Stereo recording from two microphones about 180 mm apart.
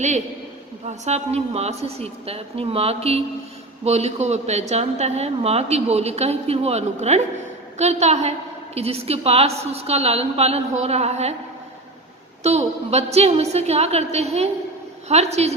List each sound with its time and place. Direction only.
0.9 s speech: 40° right (ahead or behind)
12.4 s speech: 35° right (ahead or behind)